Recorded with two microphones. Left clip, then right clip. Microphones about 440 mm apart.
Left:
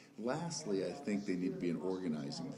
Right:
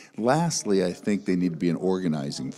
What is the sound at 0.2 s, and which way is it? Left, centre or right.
Speech, right.